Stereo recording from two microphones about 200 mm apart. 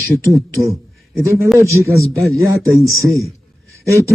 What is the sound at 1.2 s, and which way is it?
A man's voice, 15° right (ahead or behind).